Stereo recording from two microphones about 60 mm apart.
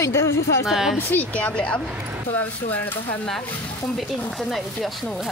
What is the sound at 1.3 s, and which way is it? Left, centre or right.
Speech, centre.